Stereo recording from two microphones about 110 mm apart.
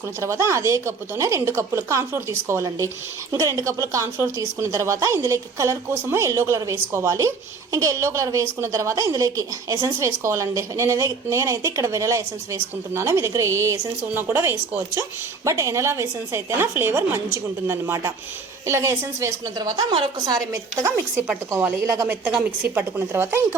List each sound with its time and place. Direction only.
0.2 s a woman's voice: 25° right (ahead or behind)
19.5 s a woman's voice: 40° right (ahead or behind); by 23.6 s 20° right (ahead or behind)